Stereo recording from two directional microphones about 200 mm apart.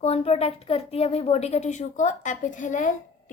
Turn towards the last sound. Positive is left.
turn(degrees=40)  # may be behind; listen again after turning